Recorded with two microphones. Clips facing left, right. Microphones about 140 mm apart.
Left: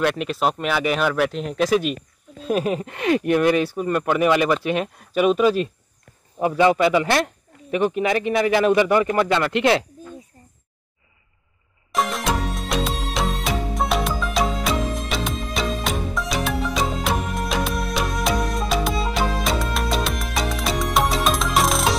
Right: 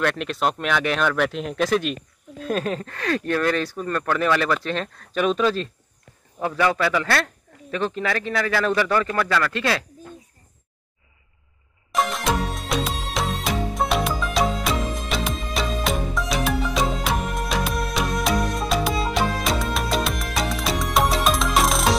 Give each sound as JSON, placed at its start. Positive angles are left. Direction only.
{"t": 0.0, "sound": "speech", "side_deg": 5}
{"t": 11.9, "sound": "music", "side_deg": 0}